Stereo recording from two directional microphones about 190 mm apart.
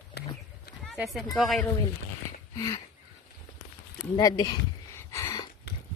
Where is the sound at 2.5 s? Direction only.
20° left (ahead or behind).